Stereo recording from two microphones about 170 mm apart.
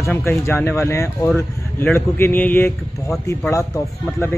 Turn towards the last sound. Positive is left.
turn(degrees=20)  # may be behind; listen again after turning